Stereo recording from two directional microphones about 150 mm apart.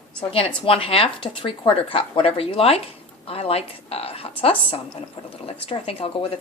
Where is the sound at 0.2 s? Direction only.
40° left (ahead or behind).